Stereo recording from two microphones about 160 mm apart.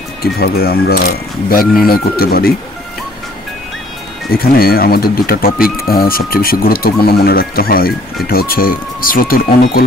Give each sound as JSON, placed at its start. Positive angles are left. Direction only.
{"t": 0.2, "sound": "speech", "side_deg": 75}
{"t": 4.3, "sound": "speech", "side_deg": 70}